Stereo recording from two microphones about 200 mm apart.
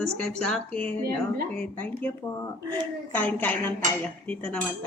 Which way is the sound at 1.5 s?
10° left (ahead or behind).